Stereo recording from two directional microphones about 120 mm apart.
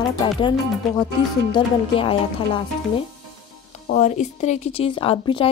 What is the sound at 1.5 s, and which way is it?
Speech, 45° left (ahead or behind).